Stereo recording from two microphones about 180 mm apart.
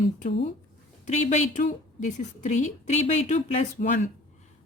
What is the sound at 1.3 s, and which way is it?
A woman's voice, 45° left (ahead or behind).